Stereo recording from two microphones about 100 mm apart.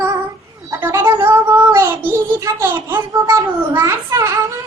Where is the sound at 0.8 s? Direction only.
25° right (ahead or behind).